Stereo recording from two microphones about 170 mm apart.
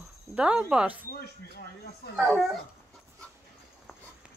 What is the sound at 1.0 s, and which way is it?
Speech, 70° left (ahead or behind).